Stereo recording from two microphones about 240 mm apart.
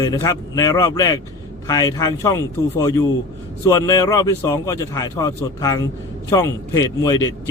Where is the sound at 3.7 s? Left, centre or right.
Centre.